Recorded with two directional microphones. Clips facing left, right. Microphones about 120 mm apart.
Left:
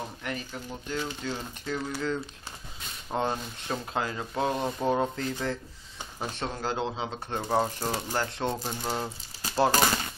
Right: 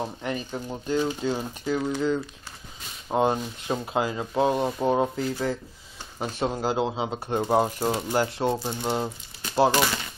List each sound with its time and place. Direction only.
0.0 s speech: 25° right (ahead or behind)
3.1 s speech: 15° right (ahead or behind)
9.7 s speech: 40° left (ahead or behind)